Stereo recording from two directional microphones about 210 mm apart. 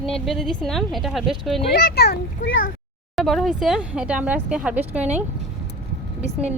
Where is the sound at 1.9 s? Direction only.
50° left (ahead or behind).